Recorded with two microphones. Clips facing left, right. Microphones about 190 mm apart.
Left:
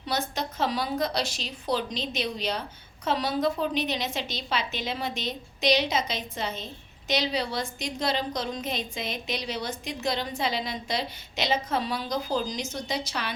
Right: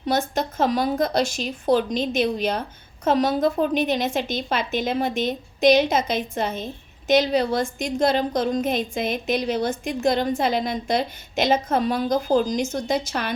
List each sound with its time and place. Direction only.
0.0 s a woman's voice: 50° right (ahead or behind)